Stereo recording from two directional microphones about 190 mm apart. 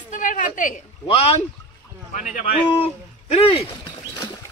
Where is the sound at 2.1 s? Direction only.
40° left (ahead or behind).